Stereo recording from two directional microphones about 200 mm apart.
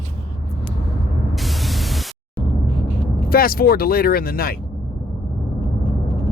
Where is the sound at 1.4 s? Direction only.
Centre (ahead or behind).